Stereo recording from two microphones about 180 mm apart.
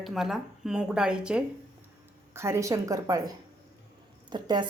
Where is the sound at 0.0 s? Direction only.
Centre (ahead or behind).